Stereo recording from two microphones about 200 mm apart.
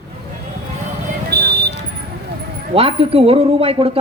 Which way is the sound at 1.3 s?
50° right (ahead or behind).